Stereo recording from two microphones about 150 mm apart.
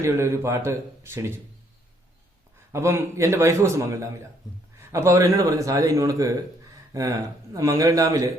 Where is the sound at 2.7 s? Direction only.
15° right (ahead or behind).